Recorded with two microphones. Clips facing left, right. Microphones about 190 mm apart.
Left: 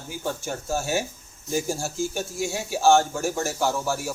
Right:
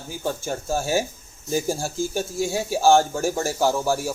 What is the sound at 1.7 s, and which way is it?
Speech, 35° right (ahead or behind).